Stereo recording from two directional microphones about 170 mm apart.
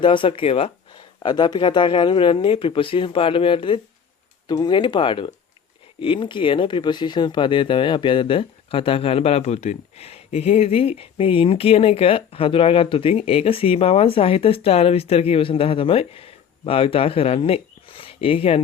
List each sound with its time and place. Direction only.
0.0 s speech: 30° left (ahead or behind)